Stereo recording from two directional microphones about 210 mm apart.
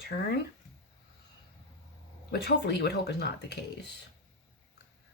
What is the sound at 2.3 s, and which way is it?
Speech, 50° left (ahead or behind).